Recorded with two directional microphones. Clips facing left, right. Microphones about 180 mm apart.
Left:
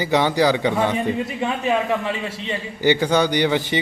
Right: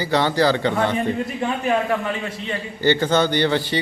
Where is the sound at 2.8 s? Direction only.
15° left (ahead or behind).